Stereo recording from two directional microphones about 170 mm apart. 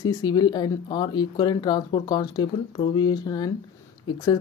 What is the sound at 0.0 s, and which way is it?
Speech, 25° left (ahead or behind).